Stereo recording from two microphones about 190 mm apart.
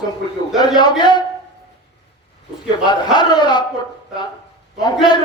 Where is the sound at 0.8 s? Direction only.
20° left (ahead or behind).